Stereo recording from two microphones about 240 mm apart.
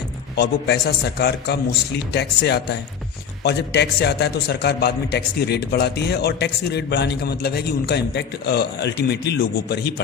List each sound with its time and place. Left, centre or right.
0.3 s a man's voice: left